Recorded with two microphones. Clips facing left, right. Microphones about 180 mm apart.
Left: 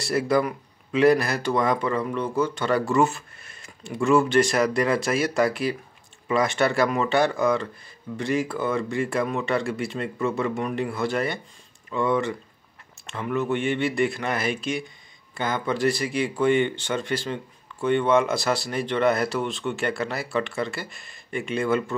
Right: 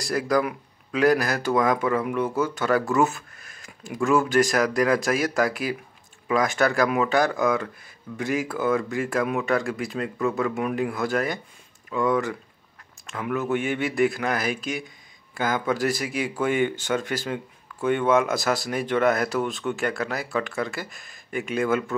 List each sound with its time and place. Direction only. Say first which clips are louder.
0.0 s speech: left 1 dB; centre (ahead or behind)